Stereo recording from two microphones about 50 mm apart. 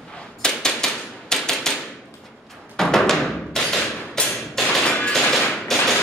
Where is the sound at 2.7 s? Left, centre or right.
Centre.